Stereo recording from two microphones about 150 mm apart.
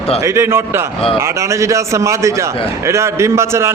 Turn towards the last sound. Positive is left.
turn(degrees=-20)  # may be behind; listen again after turning